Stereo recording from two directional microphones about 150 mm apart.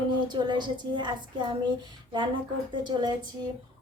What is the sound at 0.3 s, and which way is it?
A woman's voice, 30° right (ahead or behind).